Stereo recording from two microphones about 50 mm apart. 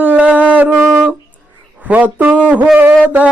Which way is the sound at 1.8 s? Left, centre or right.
Right.